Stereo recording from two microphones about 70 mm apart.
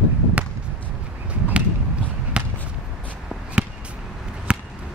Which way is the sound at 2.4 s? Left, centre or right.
Centre.